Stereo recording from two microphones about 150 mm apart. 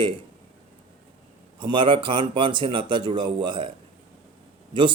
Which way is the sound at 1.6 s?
30° right (ahead or behind).